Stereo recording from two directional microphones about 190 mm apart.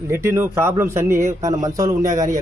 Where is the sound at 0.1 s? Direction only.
15° right (ahead or behind).